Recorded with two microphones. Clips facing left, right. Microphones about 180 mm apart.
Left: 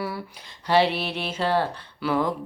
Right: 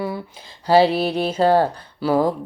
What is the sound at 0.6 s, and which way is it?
Music, 35° right (ahead or behind).